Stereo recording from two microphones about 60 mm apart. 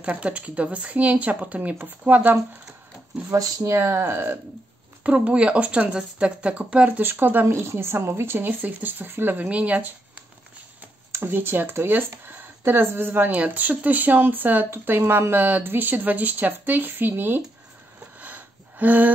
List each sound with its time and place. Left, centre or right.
0.0 s speech: right
3.3 s speech: right
3.6 s speech: right
5.0 s speech: centre
7.0 s speech: right
9.4 s speech: right
11.1 s speech: right
18.2 s a sound: right